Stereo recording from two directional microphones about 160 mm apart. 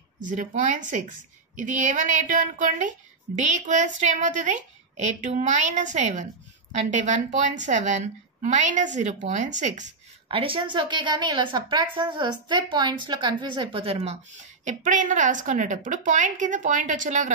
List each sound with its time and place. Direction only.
0.2 s a woman's voice: 55° right (ahead or behind)
10.2 s a woman's voice: 35° right (ahead or behind)
14.7 s a woman's voice: 50° right (ahead or behind)